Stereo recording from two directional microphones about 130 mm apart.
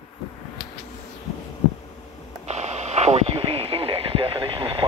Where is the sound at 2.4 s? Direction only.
60° right (ahead or behind); by 4.8 s 45° right (ahead or behind).